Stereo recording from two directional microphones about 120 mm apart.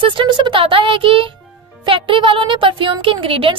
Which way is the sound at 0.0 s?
40° right (ahead or behind).